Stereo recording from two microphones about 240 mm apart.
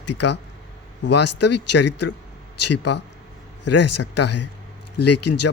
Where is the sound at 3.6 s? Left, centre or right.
Left.